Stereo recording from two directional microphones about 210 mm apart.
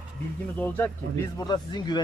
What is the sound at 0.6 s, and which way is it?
Speech, 10° left (ahead or behind).